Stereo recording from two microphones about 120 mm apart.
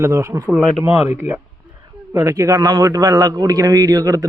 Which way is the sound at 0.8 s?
65° left (ahead or behind).